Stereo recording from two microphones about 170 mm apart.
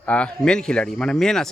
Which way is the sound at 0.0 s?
5° left (ahead or behind).